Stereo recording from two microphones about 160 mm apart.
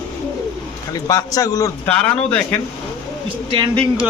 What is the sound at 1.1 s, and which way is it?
Speech, 20° left (ahead or behind).